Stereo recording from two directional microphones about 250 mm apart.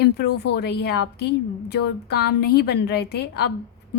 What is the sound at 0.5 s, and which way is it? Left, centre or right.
A woman's voice, left.